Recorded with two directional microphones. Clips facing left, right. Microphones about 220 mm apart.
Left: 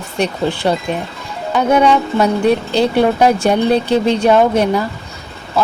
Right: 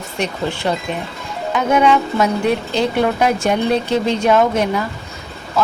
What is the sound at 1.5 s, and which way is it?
Speech, 35° left (ahead or behind).